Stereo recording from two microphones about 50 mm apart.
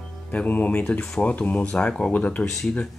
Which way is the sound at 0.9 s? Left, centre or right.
Centre.